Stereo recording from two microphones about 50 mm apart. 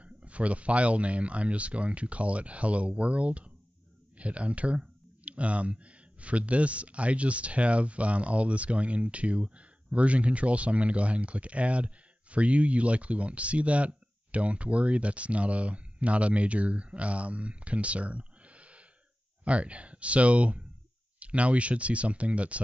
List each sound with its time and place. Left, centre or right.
0.0 s speech: right